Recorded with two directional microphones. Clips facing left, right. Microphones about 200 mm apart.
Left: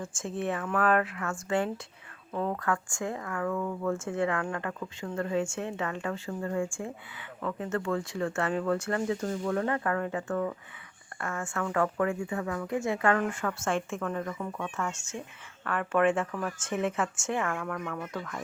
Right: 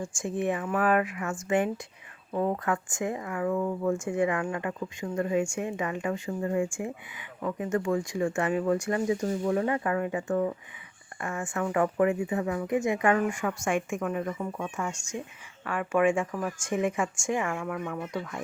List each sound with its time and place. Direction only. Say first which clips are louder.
0.0 s speech: right 3 dB; 15° right (ahead or behind)